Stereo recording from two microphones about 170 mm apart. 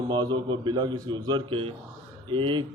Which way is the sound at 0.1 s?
25° right (ahead or behind).